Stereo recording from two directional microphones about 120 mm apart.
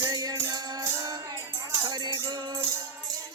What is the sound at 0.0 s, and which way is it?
Music, 30° right (ahead or behind).